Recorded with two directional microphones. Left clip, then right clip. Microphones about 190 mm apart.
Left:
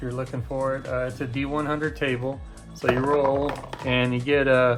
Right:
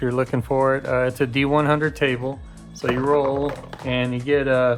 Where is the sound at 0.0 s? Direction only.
50° right (ahead or behind).